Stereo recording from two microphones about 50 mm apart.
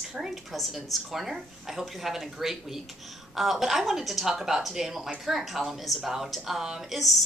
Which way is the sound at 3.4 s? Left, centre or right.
Centre.